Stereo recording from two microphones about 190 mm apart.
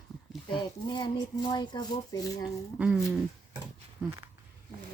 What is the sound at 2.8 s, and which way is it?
Speech, centre (ahead or behind).